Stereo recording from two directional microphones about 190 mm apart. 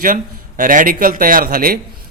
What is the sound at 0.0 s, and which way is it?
A man's voice, 45° right (ahead or behind).